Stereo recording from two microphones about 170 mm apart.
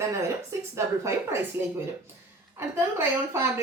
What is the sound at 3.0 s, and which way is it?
Speech, 15° right (ahead or behind).